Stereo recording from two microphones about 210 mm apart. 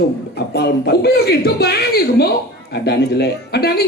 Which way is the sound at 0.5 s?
50° left (ahead or behind).